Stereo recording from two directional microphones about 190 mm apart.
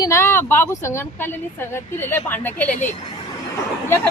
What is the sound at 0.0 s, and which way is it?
Speech, 15° left (ahead or behind).